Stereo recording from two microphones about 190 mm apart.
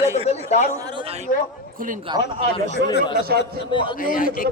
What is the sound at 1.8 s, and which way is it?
Speech, 45° right (ahead or behind).